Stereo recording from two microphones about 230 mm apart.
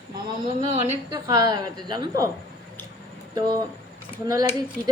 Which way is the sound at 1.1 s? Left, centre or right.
Centre.